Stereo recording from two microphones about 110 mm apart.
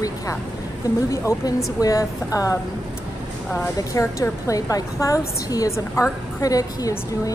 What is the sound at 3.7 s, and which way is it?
A woman's voice, 30° left (ahead or behind).